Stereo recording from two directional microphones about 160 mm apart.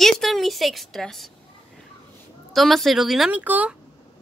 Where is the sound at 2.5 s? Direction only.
Centre (ahead or behind).